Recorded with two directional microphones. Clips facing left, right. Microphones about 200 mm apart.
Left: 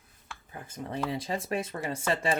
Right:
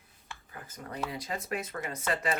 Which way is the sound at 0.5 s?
25° left (ahead or behind).